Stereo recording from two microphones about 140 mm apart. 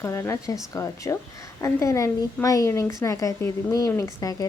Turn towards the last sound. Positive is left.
turn(degrees=25)  # may be behind; listen again after turning